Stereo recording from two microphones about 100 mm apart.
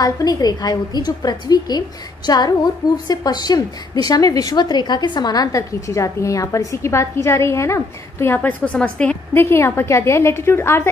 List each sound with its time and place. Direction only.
0.0 s a woman's voice: 40° left (ahead or behind)
8.4 s a woman's voice: 15° left (ahead or behind)
9.3 s a woman's voice: 25° left (ahead or behind)